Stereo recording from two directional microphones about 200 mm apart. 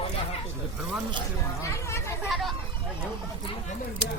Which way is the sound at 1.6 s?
15° left (ahead or behind).